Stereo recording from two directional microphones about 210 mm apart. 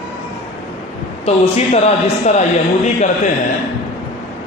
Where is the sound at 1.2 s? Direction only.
30° left (ahead or behind).